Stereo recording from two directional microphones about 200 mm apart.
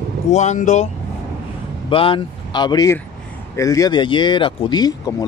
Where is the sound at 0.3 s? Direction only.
35° left (ahead or behind).